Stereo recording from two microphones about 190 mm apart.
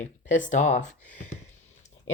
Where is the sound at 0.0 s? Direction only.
40° left (ahead or behind).